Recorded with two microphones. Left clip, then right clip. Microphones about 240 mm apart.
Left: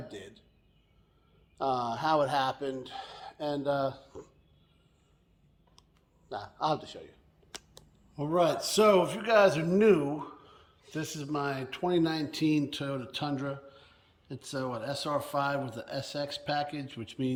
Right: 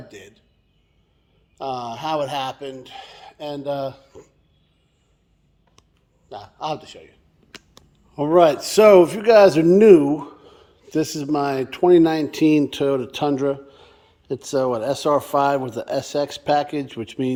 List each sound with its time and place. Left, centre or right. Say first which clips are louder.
0.1 s speech: right 4 dB; centre
1.5 s speech: right 3 dB; centre
6.2 s speech: right 3 dB; centre
8.1 s a man's voice: right 12 dB; centre